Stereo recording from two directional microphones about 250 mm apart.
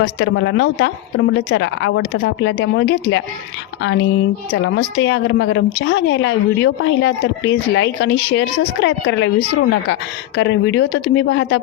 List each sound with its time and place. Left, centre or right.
0.2 s a woman's voice: left